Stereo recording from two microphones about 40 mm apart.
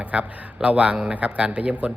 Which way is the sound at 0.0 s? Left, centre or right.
Right.